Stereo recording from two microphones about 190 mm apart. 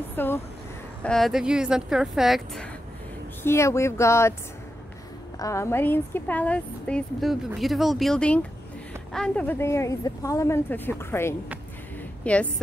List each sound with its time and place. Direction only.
0.1 s a sound: 10° left (ahead or behind)
1.0 s speech: centre (ahead or behind)
3.4 s a woman's voice: 15° left (ahead or behind)
5.4 s a woman's voice: 15° left (ahead or behind)